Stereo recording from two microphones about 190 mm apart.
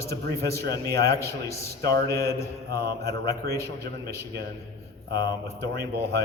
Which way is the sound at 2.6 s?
55° right (ahead or behind).